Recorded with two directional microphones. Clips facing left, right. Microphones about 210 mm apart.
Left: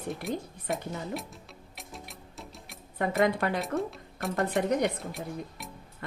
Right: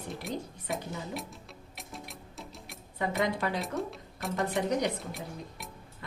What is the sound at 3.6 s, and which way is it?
Speech, centre (ahead or behind).